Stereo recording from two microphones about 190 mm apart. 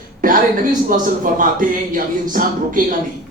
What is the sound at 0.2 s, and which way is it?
A man's voice, 45° right (ahead or behind).